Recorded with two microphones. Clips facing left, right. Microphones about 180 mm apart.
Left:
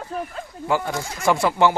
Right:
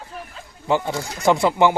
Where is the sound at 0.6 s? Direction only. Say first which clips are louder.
Right 2 dB; 20° right (ahead or behind).